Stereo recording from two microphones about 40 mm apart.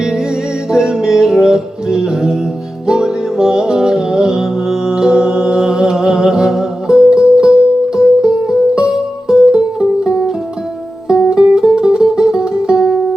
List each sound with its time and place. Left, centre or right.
0.0 s music: centre
11.1 s music: centre